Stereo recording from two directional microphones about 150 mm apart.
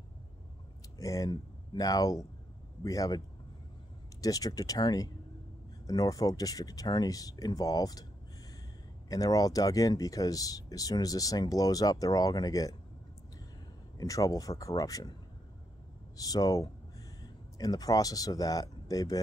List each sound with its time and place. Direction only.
0.9 s speech: 25° left (ahead or behind)
4.2 s speech: 25° left (ahead or behind)
9.1 s speech: 25° left (ahead or behind)
13.9 s speech: 20° left (ahead or behind)
16.2 s speech: 25° left (ahead or behind)